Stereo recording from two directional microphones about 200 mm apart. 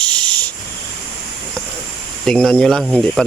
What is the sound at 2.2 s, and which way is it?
Speech, 5° left (ahead or behind).